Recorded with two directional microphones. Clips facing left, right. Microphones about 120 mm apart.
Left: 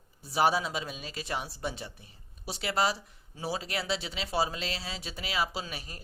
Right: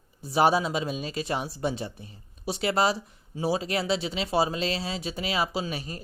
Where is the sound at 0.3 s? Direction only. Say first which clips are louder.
Right 5 dB; 25° right (ahead or behind).